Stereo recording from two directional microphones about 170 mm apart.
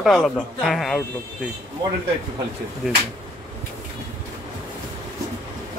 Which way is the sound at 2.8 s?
Centre (ahead or behind).